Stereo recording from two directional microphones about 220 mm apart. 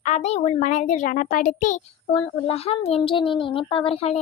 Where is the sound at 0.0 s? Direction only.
30° left (ahead or behind).